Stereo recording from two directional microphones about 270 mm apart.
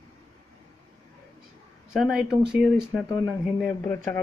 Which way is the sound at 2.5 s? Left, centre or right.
Centre.